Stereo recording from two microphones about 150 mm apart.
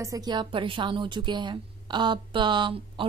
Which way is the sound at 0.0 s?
25° right (ahead or behind).